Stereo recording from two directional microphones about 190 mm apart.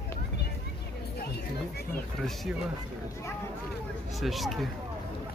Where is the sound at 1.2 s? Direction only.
55° left (ahead or behind).